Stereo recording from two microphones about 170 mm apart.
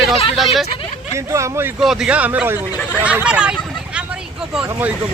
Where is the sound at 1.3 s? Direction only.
15° right (ahead or behind).